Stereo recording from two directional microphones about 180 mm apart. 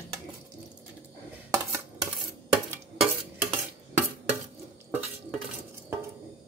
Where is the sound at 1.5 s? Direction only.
20° right (ahead or behind).